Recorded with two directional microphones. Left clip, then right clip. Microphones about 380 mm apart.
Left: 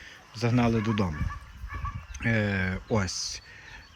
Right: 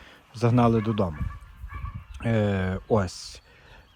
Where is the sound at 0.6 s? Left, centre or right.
Centre.